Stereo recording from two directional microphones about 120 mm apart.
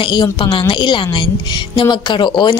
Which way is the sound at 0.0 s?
40° left (ahead or behind).